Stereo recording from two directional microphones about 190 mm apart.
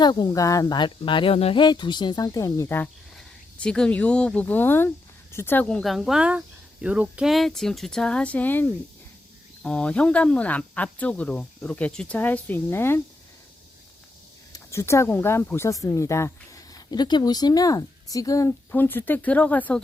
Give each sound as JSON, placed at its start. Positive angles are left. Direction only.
{"t": 0.0, "sound": "speech", "side_deg": 20}
{"t": 14.5, "sound": "speech", "side_deg": 15}